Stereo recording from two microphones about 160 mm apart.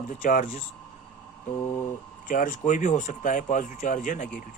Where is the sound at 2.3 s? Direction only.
55° left (ahead or behind).